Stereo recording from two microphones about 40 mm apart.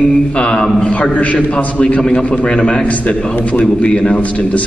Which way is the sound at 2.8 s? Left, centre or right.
Left.